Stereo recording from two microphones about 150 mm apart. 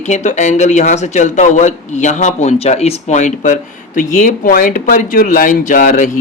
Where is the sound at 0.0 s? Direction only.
50° left (ahead or behind).